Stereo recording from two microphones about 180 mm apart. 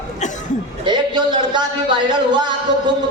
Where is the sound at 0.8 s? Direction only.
25° right (ahead or behind).